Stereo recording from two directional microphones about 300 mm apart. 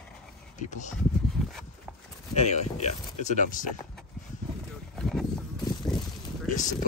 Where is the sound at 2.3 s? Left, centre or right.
Left.